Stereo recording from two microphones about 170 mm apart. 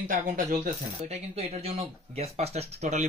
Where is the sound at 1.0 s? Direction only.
40° right (ahead or behind).